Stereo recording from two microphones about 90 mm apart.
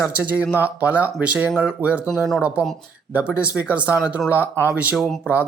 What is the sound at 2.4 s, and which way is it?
Speech, 15° right (ahead or behind).